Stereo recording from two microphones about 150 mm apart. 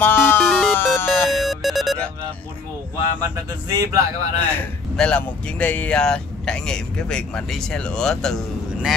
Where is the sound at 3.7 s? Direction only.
20° right (ahead or behind).